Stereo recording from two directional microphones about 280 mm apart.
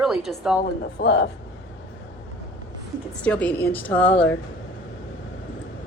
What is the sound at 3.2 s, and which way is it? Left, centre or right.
A woman's voice, centre.